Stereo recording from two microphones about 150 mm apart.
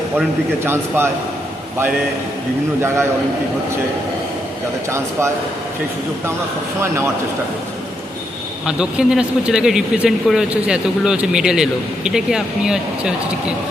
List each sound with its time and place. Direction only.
0.6 s speech: 15° right (ahead or behind)
2.8 s speech: 15° right (ahead or behind)
4.9 s speech: 20° right (ahead or behind)
6.8 s speech: 15° right (ahead or behind)
8.6 s speech: 5° right (ahead or behind)